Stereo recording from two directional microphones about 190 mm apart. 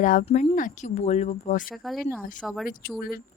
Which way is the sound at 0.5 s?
40° left (ahead or behind).